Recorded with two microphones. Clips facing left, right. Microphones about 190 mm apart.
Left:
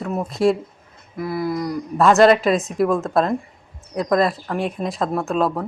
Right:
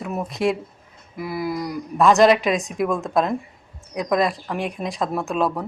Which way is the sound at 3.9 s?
5° right (ahead or behind).